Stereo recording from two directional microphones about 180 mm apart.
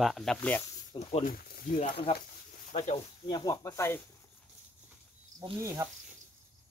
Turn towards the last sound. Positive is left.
turn(degrees=-15)  # may be behind; listen again after turning